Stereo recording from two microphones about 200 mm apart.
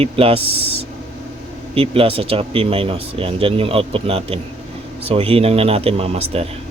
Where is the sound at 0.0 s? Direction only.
30° right (ahead or behind).